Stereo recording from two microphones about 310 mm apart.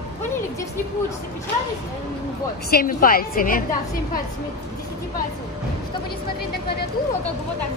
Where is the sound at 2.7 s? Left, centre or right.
Left.